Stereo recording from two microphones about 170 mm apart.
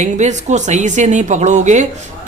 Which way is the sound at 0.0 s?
45° right (ahead or behind).